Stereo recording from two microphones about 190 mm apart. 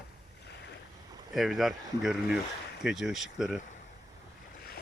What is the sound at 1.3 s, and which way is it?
Speech, centre (ahead or behind).